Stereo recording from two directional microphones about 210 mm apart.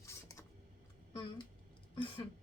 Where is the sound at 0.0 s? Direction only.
15° left (ahead or behind).